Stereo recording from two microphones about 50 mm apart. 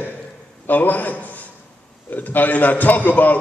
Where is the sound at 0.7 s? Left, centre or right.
Left.